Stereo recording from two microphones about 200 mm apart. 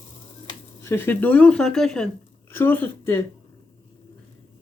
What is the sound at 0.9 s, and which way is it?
Speech, 10° left (ahead or behind).